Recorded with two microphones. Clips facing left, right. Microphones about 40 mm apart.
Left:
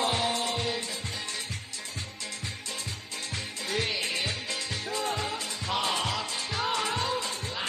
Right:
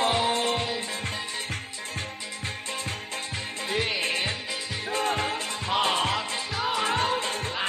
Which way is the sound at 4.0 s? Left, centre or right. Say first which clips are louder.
Right 3 dB; right.